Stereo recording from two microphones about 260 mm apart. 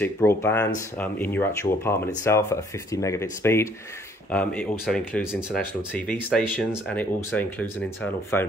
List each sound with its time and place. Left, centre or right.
0.0 s speech: centre